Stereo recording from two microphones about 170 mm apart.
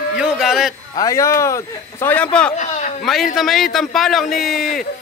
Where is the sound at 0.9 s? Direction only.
20° left (ahead or behind).